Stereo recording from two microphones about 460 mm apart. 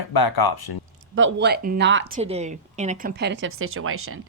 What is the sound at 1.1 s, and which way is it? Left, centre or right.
Speech, right.